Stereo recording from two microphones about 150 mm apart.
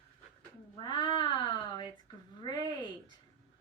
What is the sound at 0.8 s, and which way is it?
Speech, 30° left (ahead or behind).